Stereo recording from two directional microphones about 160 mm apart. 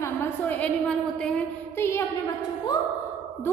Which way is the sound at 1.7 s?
15° left (ahead or behind).